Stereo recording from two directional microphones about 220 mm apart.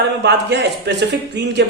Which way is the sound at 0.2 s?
50° right (ahead or behind).